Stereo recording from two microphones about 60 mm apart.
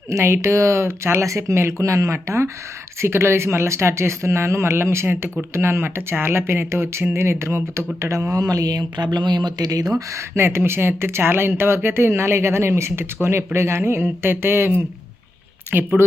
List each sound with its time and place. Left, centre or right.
0.2 s speech: right
10.1 s speech: right